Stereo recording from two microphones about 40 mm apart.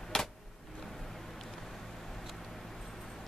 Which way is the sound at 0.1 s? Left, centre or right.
Centre.